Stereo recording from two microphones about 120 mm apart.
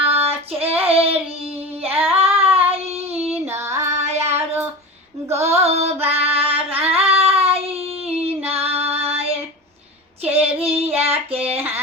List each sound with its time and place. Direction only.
0.0 s child singing: 55° right (ahead or behind)
1.8 s female singing: 55° right (ahead or behind)
2.1 s child singing: 55° right (ahead or behind)
3.4 s child singing: 25° right (ahead or behind)
3.8 s child singing: 70° right (ahead or behind)
5.5 s female singing: 65° right (ahead or behind)
6.8 s child singing: 55° right (ahead or behind)
8.6 s female singing: 55° right (ahead or behind)
10.2 s child singing: 55° right (ahead or behind)